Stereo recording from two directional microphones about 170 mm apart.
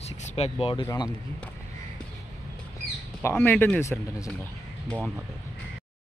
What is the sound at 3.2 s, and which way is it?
Speech, 10° left (ahead or behind).